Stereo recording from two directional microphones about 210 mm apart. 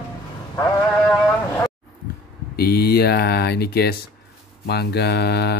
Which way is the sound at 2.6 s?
50° left (ahead or behind).